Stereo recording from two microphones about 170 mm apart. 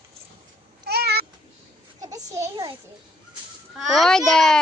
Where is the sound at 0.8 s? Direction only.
75° right (ahead or behind).